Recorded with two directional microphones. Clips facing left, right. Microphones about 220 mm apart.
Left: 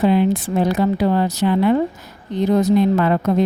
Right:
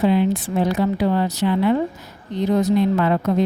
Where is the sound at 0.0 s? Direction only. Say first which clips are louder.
Left 2 dB; 45° left (ahead or behind).